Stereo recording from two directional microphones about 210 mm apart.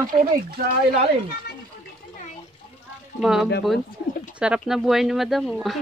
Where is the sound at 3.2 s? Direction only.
Centre (ahead or behind).